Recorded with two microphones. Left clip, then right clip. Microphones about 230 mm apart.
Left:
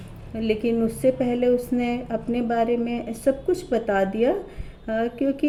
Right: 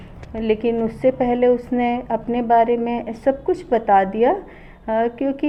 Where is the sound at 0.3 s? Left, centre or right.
Right.